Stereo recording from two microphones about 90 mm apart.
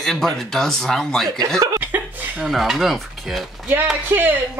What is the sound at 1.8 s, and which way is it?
Chuckle, 20° right (ahead or behind).